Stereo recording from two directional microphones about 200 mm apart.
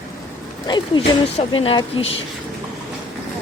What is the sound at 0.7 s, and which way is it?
Speech, 25° left (ahead or behind).